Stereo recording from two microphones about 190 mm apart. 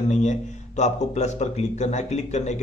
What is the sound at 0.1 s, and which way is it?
Speech, 40° left (ahead or behind).